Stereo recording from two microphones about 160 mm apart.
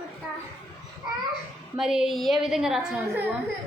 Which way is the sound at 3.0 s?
15° right (ahead or behind).